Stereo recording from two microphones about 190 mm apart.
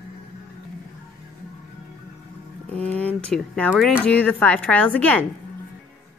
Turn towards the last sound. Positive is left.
turn(degrees=10)  # may be behind; listen again after turning